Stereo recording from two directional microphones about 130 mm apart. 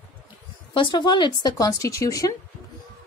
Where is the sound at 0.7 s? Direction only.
40° left (ahead or behind).